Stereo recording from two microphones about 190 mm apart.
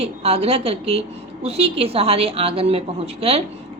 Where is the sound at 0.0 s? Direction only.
30° right (ahead or behind).